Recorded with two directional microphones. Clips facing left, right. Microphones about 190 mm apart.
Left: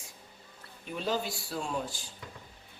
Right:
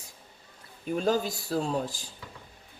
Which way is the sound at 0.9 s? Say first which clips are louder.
Right 6 dB; 45° right (ahead or behind).